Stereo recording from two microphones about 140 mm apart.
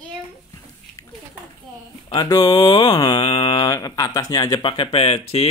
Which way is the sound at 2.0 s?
25° left (ahead or behind).